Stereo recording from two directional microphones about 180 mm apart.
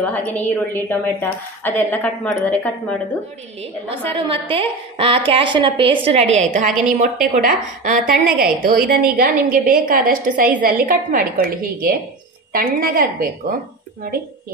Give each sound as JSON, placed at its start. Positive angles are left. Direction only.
{"t": 0.0, "sound": "a woman's voice", "side_deg": 10}
{"t": 3.9, "sound": "a woman's voice", "side_deg": -30}